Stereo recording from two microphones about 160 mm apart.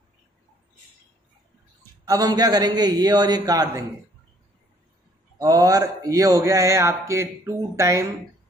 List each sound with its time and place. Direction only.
2.0 s speech: 25° right (ahead or behind)
5.4 s speech: 20° right (ahead or behind)